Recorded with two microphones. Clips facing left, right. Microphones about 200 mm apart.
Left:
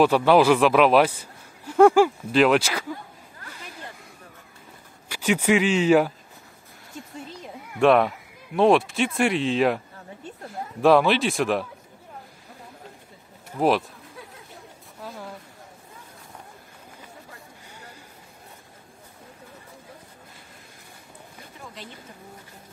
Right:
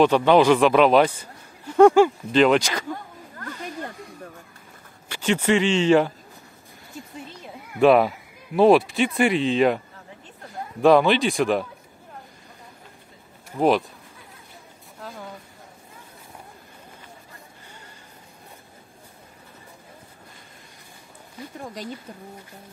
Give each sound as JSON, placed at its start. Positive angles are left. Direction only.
{"t": 0.0, "sound": "a man's voice", "side_deg": 5}
{"t": 3.3, "sound": "a sound", "side_deg": -55}
{"t": 5.0, "sound": "speech", "side_deg": 10}
{"t": 7.8, "sound": "a man's voice", "side_deg": 0}
{"t": 13.6, "sound": "a man's voice", "side_deg": 0}
{"t": 15.0, "sound": "a sound", "side_deg": 0}